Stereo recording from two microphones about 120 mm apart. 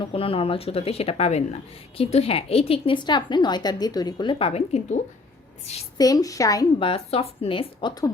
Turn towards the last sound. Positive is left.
turn(degrees=50)  # may be behind; listen again after turning